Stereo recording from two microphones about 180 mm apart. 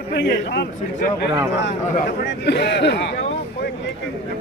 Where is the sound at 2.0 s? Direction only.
70° left (ahead or behind).